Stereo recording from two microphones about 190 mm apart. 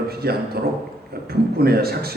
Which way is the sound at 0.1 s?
55° right (ahead or behind).